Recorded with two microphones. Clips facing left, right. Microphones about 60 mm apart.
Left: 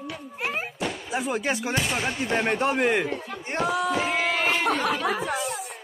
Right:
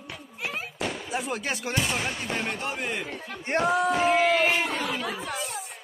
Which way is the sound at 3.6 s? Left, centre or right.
Right.